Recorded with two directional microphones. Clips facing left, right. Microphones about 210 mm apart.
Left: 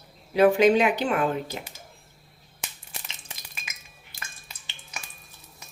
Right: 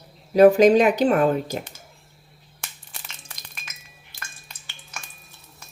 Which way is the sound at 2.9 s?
20° left (ahead or behind).